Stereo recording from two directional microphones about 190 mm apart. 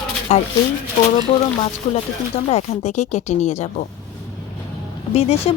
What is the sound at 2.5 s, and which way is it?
A woman's voice, 35° left (ahead or behind).